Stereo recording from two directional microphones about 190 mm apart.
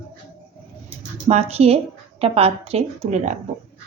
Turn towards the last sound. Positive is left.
turn(degrees=-40)  # may be behind; listen again after turning